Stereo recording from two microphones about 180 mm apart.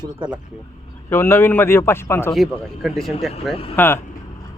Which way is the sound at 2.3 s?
Centre (ahead or behind).